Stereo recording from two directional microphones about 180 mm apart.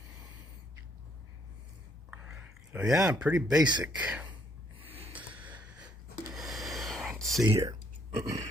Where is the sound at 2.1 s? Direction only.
5° right (ahead or behind).